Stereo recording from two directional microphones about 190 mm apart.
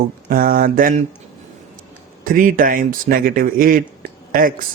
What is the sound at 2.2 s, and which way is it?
Speech, 45° right (ahead or behind).